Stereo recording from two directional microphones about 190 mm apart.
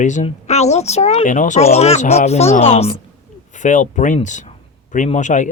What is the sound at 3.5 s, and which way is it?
Speech, 40° left (ahead or behind).